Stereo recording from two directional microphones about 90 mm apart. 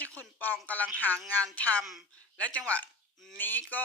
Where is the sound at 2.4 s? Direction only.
15° left (ahead or behind).